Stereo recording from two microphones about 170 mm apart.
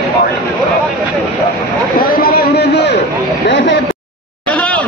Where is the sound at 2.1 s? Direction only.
65° left (ahead or behind).